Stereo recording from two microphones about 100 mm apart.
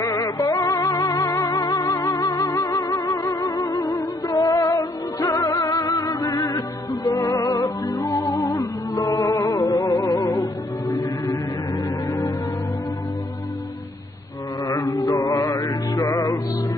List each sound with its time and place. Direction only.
0.0 s music: 35° left (ahead or behind)
14.7 s music: 35° left (ahead or behind)